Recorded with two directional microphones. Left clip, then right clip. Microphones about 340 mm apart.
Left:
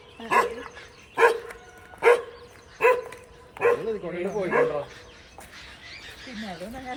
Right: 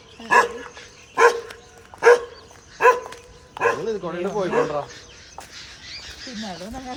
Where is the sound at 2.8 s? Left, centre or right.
Centre.